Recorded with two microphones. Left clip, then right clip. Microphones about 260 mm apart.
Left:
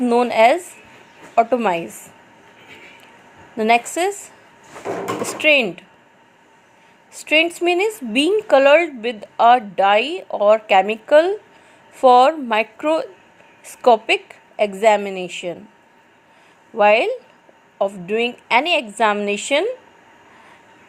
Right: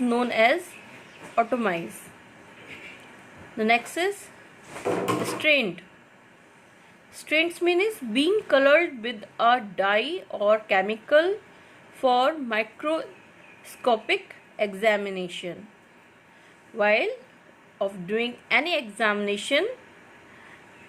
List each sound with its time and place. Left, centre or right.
0.0 s a woman's voice: left
3.6 s a woman's voice: left
5.2 s a woman's voice: left
7.1 s a woman's voice: left
16.7 s a woman's voice: left